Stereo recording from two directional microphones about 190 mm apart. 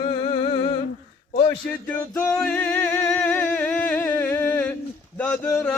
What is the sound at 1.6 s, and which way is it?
Music, 10° left (ahead or behind).